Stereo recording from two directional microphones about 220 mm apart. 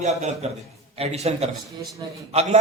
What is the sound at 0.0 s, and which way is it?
A man's voice, 30° right (ahead or behind).